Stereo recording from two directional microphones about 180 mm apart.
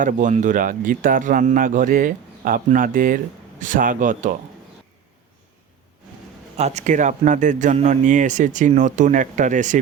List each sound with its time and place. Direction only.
0.0 s speech: 45° right (ahead or behind)
6.6 s speech: 40° right (ahead or behind)